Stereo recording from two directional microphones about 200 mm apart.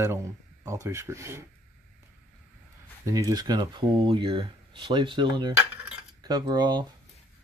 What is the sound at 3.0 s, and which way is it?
Speech, 15° right (ahead or behind).